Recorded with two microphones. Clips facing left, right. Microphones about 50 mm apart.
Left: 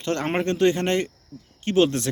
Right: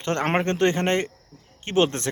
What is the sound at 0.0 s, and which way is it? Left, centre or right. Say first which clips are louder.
Speech: right 1 dB; right.